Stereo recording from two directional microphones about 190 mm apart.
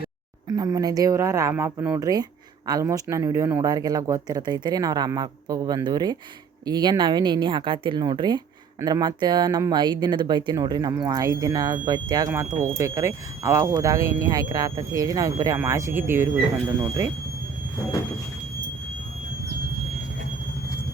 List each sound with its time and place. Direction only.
0.4 s speech: 20° right (ahead or behind)